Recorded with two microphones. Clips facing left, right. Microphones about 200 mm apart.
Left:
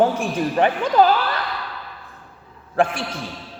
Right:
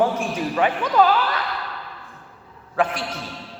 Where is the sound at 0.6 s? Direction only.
35° left (ahead or behind).